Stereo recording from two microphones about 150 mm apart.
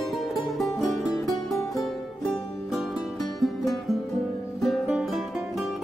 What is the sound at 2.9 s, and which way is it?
Music, centre (ahead or behind).